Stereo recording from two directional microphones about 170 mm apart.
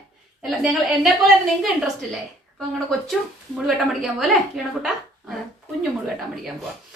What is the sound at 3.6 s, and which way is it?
A woman's voice, centre (ahead or behind).